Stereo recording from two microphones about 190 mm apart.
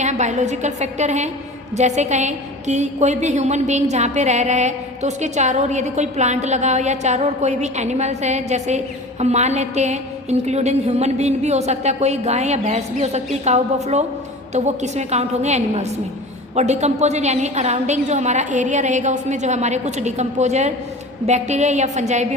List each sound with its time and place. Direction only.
0.0 s a woman's voice: 40° right (ahead or behind)